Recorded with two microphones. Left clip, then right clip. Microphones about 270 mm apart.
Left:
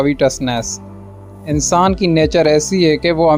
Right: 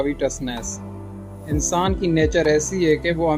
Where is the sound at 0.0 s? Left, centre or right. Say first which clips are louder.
Left 8 dB; left.